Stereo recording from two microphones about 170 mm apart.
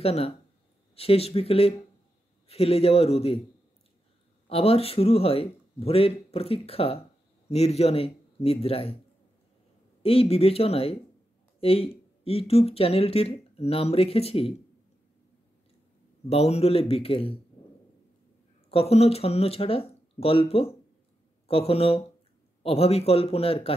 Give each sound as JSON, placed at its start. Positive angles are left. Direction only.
{"t": 0.0, "sound": "speech", "side_deg": 35}
{"t": 4.5, "sound": "speech", "side_deg": 35}
{"t": 10.0, "sound": "speech", "side_deg": 35}
{"t": 16.3, "sound": "speech", "side_deg": 40}
{"t": 18.7, "sound": "speech", "side_deg": 35}